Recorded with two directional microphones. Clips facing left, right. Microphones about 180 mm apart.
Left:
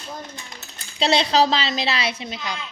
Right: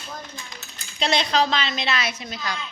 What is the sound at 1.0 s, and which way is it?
A woman's voice, 30° left (ahead or behind).